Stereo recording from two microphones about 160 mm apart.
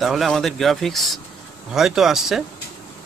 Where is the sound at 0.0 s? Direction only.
Centre (ahead or behind).